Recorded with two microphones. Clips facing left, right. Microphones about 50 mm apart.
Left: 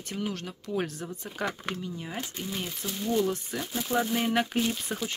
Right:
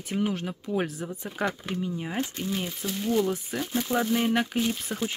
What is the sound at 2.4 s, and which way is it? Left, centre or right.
Speech, centre.